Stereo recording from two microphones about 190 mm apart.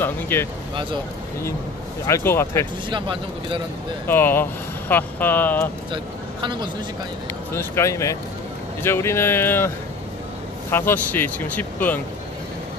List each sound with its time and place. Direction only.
0.0 s speech: 10° left (ahead or behind)
2.0 s speech: 15° left (ahead or behind)
2.9 s speech: 25° right (ahead or behind)
4.1 s speech: 10° left (ahead or behind)
6.4 s speech: 25° right (ahead or behind)
7.5 s speech: 15° left (ahead or behind)
10.7 s speech: 10° left (ahead or behind)